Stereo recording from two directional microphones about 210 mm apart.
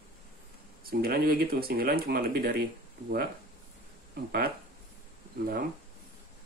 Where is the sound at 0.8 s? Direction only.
45° right (ahead or behind).